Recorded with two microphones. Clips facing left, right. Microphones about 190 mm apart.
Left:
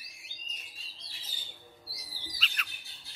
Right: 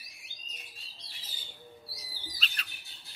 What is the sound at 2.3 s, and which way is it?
Bird, 35° right (ahead or behind).